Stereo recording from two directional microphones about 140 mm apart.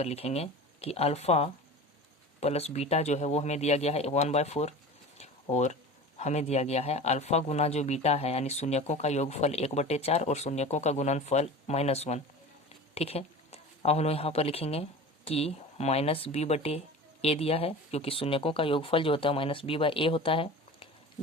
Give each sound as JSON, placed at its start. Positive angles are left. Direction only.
{"t": 0.0, "sound": "speech", "side_deg": 50}
{"t": 5.1, "sound": "a sound", "side_deg": 50}
{"t": 6.1, "sound": "speech", "side_deg": 55}